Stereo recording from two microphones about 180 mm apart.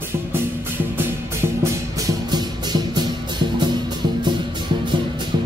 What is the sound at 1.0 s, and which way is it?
Music, 15° right (ahead or behind).